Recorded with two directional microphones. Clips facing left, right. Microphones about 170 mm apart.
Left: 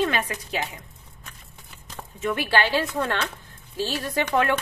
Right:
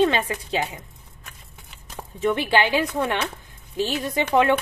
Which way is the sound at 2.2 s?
20° right (ahead or behind).